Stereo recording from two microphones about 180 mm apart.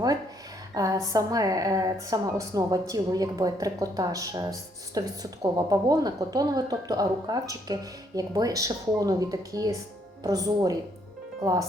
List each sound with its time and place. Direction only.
0.7 s a woman's voice: 20° right (ahead or behind)